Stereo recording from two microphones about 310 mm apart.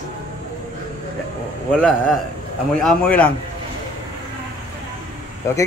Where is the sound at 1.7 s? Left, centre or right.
Centre.